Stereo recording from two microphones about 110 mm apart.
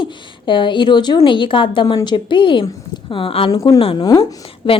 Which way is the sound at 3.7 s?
55° left (ahead or behind).